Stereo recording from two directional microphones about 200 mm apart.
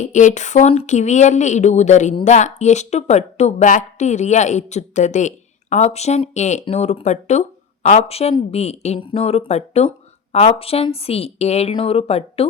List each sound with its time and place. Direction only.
0.0 s speech: 40° left (ahead or behind)